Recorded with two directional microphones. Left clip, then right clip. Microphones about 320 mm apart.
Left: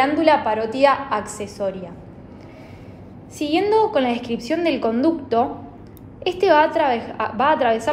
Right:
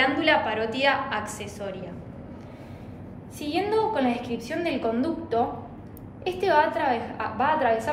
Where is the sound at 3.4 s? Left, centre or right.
Centre.